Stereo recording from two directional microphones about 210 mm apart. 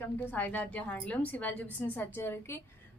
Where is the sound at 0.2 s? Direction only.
10° left (ahead or behind).